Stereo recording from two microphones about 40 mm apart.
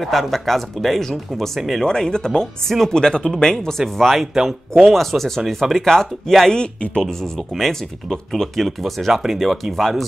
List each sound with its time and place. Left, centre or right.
0.0 s speech: centre
1.8 s speech: centre
4.3 s speech: centre